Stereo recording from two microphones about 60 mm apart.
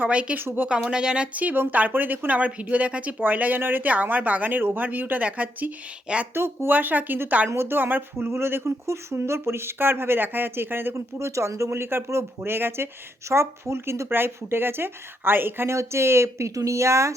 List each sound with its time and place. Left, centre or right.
0.0 s speech: right
0.3 s speech: right
0.9 s speech: centre
6.3 s speech: right
6.7 s speech: right
7.5 s speech: right
10.9 s speech: right
11.8 s speech: right
16.6 s speech: right